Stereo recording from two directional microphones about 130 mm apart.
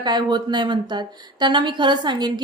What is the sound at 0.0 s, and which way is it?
A woman's voice, 35° right (ahead or behind).